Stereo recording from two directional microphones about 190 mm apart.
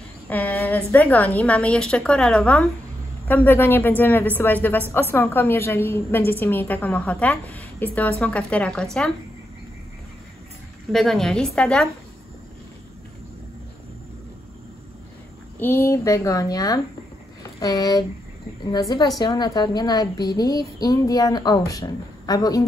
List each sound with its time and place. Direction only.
0.3 s a woman's voice: 10° left (ahead or behind)
10.9 s a woman's voice: centre (ahead or behind)
15.6 s a woman's voice: 15° left (ahead or behind)